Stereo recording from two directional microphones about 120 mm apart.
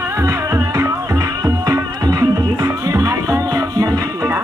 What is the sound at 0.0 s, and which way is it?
Music, 25° right (ahead or behind).